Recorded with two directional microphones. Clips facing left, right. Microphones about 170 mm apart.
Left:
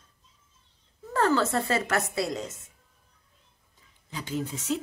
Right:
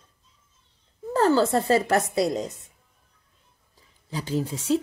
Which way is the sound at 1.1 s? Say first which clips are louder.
Right 4 dB; 30° right (ahead or behind).